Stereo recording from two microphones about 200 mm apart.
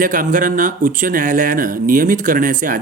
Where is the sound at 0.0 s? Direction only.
40° right (ahead or behind).